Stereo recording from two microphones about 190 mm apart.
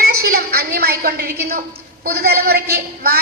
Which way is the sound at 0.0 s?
55° right (ahead or behind).